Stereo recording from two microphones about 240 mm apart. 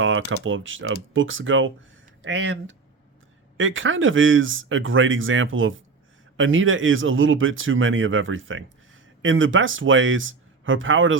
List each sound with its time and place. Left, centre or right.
0.0 s speech: right